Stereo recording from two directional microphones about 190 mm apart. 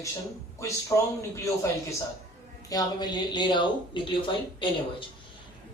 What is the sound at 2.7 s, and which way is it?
Speech, 20° left (ahead or behind).